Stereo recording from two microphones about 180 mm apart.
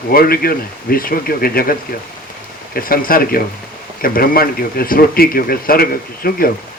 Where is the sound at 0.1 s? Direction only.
55° left (ahead or behind).